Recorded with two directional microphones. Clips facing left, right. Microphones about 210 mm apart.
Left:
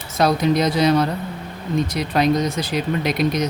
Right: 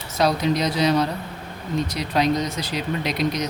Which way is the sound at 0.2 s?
50° left (ahead or behind).